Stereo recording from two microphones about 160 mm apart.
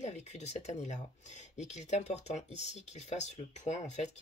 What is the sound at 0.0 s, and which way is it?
Speech, 45° left (ahead or behind).